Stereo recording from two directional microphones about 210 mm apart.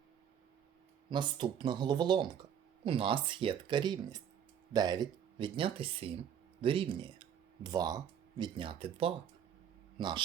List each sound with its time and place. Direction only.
1.1 s speech: 20° right (ahead or behind)